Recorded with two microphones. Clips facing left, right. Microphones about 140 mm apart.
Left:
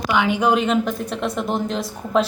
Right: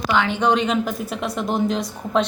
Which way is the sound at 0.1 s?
10° left (ahead or behind).